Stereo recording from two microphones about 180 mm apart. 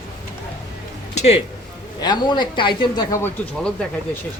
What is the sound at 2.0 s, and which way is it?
Speech, 25° left (ahead or behind).